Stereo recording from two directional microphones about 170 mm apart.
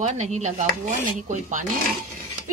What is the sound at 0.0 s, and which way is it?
A woman's voice, 45° right (ahead or behind).